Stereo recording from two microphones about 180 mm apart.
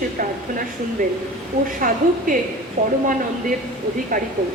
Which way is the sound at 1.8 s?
50° right (ahead or behind).